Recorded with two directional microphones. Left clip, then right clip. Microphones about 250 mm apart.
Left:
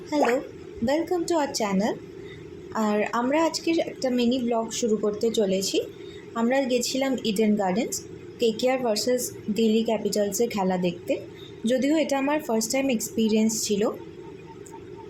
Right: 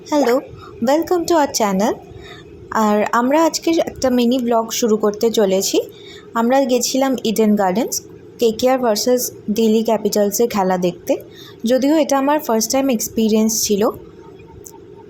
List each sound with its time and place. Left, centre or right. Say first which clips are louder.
0.1 s a woman's voice: right 7 dB; right